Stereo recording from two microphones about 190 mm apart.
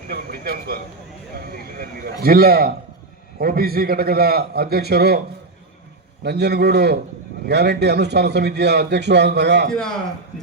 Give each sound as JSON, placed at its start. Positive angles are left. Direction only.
{"t": 0.1, "sound": "a man's voice", "side_deg": -55}
{"t": 6.2, "sound": "a man's voice", "side_deg": -60}